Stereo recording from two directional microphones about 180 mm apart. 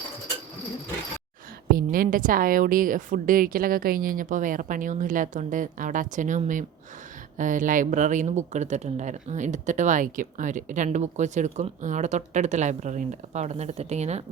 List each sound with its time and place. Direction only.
1.7 s a woman's voice: 55° right (ahead or behind); by 14.3 s 35° right (ahead or behind)